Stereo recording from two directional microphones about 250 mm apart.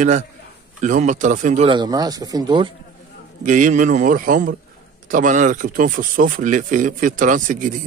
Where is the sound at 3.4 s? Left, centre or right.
Right.